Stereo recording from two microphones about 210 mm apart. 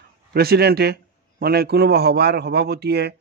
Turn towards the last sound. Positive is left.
turn(degrees=-50)  # may be behind; listen again after turning